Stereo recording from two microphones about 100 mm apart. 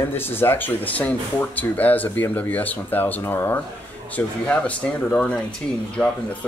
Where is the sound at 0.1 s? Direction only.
20° left (ahead or behind).